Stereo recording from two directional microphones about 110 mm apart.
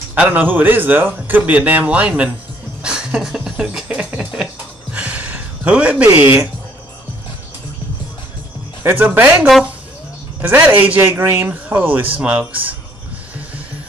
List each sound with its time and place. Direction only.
0.1 s a man's voice: 15° right (ahead or behind)
2.8 s music: 5° right (ahead or behind)
4.9 s a sound: 15° right (ahead or behind)
6.1 s a man's voice: 15° right (ahead or behind)
8.8 s a man's voice: 15° right (ahead or behind)